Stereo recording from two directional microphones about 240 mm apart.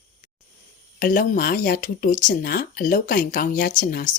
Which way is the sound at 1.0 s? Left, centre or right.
Left.